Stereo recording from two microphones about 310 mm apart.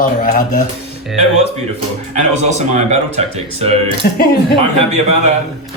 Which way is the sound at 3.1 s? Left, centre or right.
Centre.